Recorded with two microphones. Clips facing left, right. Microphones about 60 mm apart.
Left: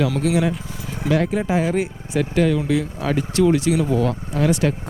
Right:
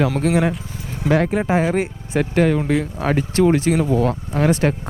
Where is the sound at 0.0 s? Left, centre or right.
Right.